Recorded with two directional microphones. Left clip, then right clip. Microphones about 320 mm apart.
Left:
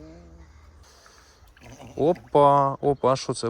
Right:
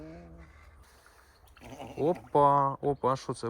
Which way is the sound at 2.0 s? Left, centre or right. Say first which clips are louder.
Left 6 dB; centre.